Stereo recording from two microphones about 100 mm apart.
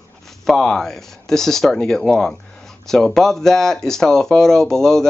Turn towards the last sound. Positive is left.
turn(degrees=5)  # may be behind; listen again after turning